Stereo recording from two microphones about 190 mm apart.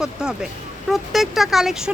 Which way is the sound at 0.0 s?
5° right (ahead or behind).